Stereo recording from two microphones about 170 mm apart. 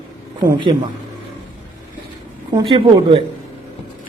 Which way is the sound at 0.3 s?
25° right (ahead or behind).